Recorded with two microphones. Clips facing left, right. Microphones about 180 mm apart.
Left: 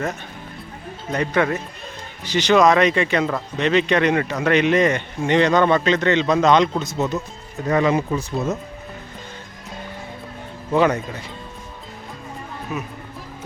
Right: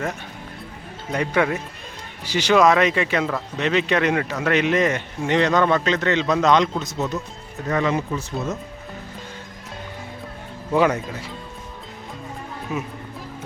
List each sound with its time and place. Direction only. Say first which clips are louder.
1.1 s speech: left 1 dB; 10° right (ahead or behind)
7.7 s speech: left 4 dB; 15° left (ahead or behind)
10.8 s speech: left 1 dB; 10° right (ahead or behind)
12.7 s speech: right 1 dB; 20° right (ahead or behind)